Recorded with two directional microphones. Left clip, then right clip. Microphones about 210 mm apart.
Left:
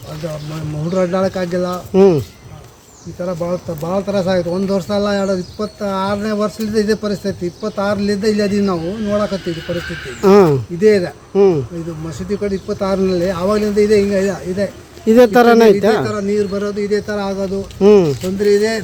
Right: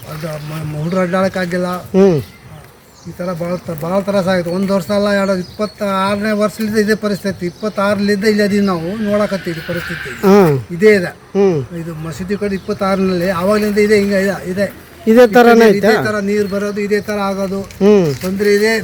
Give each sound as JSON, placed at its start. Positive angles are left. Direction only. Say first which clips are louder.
{"t": 0.9, "sound": "a man's voice", "louder": "right 1 dB", "side_deg": 5}
{"t": 16.0, "sound": "speech", "louder": "right 2 dB", "side_deg": 10}